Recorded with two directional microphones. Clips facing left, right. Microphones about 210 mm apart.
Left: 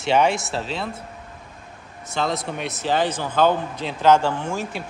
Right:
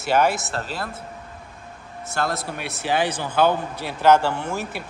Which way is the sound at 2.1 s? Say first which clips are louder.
Left 2 dB; 5° right (ahead or behind).